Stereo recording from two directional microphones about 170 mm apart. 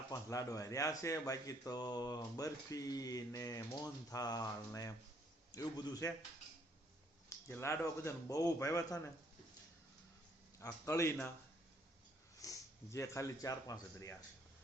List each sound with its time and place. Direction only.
0.1 s speech: 20° left (ahead or behind)
7.3 s a man's voice: 15° left (ahead or behind)
10.6 s a man's voice: 20° left (ahead or behind)
12.4 s speech: 20° left (ahead or behind)